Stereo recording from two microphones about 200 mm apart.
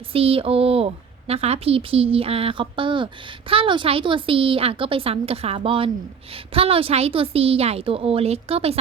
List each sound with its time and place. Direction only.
0.1 s speech: 30° right (ahead or behind)